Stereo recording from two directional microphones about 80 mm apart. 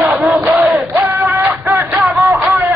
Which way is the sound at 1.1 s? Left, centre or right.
Right.